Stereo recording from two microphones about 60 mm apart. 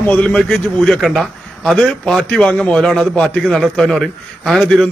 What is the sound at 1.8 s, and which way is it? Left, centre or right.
A man's voice, centre.